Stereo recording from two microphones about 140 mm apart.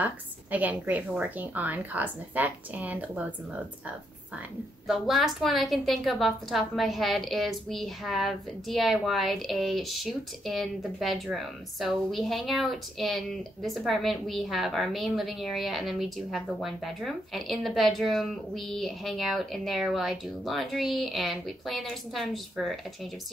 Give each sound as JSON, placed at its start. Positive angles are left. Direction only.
{"t": 0.0, "sound": "a woman's voice", "side_deg": -10}
{"t": 4.8, "sound": "a woman's voice", "side_deg": 0}